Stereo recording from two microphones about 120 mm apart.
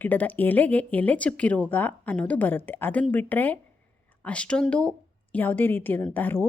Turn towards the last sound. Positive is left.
turn(degrees=15)  # may be behind; listen again after turning